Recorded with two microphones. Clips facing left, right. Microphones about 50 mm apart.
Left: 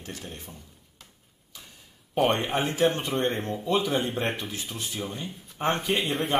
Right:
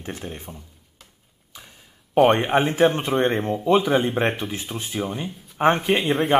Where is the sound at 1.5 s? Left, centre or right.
Right.